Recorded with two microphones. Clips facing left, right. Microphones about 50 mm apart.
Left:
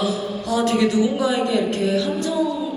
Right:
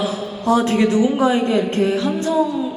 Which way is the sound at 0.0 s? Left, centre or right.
Right.